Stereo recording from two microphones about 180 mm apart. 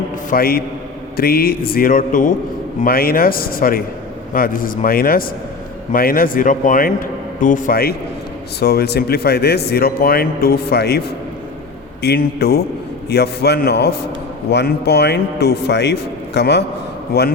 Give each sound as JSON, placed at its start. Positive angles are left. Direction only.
{"t": 0.3, "sound": "a man's voice", "side_deg": 55}
{"t": 12.0, "sound": "a man's voice", "side_deg": 65}